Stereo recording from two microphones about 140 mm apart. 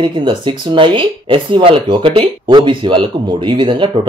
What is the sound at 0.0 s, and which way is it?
Speech, 35° right (ahead or behind).